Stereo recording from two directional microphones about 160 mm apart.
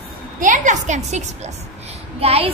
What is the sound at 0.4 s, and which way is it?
A woman's voice, 50° right (ahead or behind).